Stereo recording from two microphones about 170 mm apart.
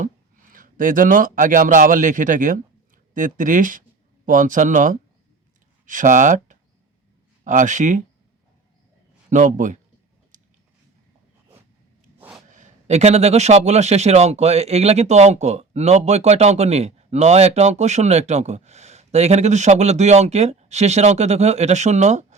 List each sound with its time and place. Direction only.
0.5 s speech: 55° right (ahead or behind)
9.3 s speech: 45° right (ahead or behind)
10.3 s a sound: 50° right (ahead or behind)
12.5 s a man's voice: 45° right (ahead or behind)